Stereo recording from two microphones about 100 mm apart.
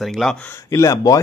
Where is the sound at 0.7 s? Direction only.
35° left (ahead or behind).